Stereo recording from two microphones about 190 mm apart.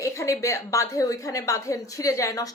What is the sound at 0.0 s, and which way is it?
A woman's voice, 15° left (ahead or behind).